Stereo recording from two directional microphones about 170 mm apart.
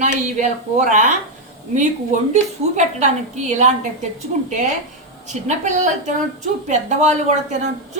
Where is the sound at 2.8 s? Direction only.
45° right (ahead or behind).